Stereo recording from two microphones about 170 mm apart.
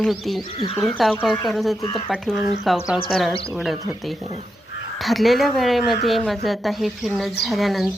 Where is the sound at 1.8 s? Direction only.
35° left (ahead or behind).